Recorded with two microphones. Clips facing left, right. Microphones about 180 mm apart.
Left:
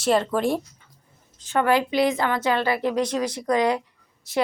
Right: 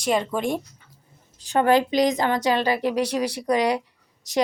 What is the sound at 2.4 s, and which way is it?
A woman's voice, 15° right (ahead or behind).